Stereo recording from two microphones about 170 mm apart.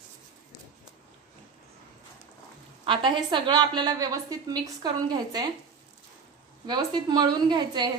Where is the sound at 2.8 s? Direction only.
30° right (ahead or behind).